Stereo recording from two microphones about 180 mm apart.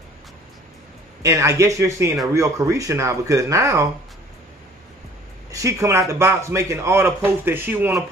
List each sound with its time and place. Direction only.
1.2 s a man's voice: 15° right (ahead or behind)
5.5 s a man's voice: 20° right (ahead or behind)